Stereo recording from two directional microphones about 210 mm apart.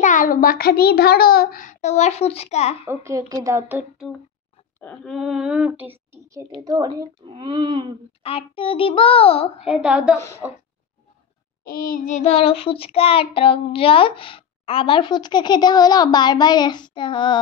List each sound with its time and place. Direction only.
0.0 s a child's voice: 40° left (ahead or behind)
2.9 s a woman's voice: 15° right (ahead or behind)
4.7 s a woman's voice: 5° left (ahead or behind); by 8.0 s 25° right (ahead or behind)
8.2 s child singing: 25° left (ahead or behind)
9.7 s speech: 5° right (ahead or behind)
10.1 s a woman's voice: 15° left (ahead or behind)
11.6 s child singing: 45° left (ahead or behind); by 17.4 s 20° left (ahead or behind)